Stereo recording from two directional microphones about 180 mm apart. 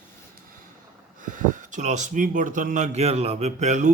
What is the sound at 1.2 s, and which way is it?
Speech, 45° right (ahead or behind).